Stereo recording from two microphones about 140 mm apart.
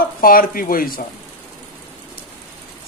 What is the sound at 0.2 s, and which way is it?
Speech, 90° left.